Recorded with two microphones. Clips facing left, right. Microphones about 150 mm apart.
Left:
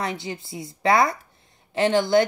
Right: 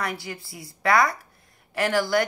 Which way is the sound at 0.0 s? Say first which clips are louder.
Left 2 dB; 25° left (ahead or behind).